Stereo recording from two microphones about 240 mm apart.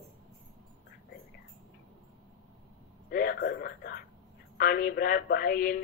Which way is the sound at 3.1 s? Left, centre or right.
Left.